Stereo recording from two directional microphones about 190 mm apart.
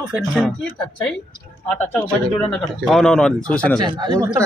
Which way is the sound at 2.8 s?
Centre (ahead or behind).